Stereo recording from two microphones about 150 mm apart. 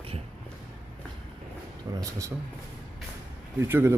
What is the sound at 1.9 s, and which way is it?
Speech, 20° right (ahead or behind).